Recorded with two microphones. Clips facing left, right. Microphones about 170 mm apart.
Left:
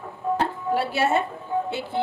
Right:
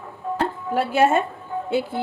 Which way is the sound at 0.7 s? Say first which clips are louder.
Right 4 dB; 50° right (ahead or behind).